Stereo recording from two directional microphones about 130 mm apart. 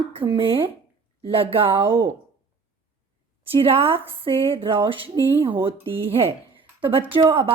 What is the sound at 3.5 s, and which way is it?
Speech, 45° right (ahead or behind).